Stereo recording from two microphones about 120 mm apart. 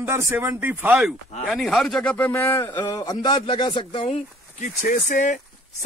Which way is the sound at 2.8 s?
30° left (ahead or behind).